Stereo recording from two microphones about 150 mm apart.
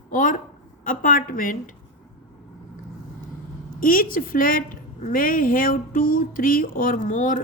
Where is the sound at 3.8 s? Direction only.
70° left (ahead or behind).